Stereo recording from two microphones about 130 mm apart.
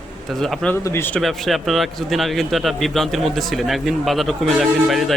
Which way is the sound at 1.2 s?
Centre (ahead or behind).